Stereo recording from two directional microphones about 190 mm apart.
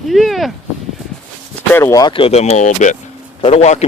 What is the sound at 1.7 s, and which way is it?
Speech, 15° left (ahead or behind).